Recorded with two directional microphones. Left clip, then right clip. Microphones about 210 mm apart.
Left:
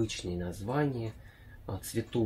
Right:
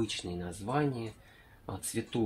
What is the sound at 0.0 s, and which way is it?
Speech, 30° right (ahead or behind).